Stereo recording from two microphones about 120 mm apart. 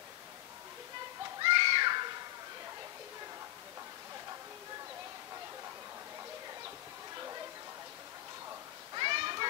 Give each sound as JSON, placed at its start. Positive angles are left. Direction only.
{"t": 1.4, "sound": "children playing", "side_deg": -40}
{"t": 8.9, "sound": "children playing", "side_deg": -40}